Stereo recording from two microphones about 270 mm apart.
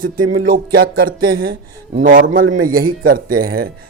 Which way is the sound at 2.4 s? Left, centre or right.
Right.